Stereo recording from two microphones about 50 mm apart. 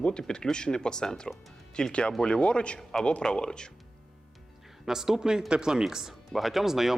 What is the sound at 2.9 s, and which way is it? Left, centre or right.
Speech, centre.